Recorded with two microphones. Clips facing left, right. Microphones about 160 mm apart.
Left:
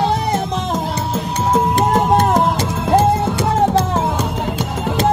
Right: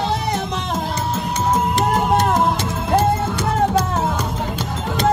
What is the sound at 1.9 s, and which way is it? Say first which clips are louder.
Music: left 3 dB; 30° left (ahead or behind).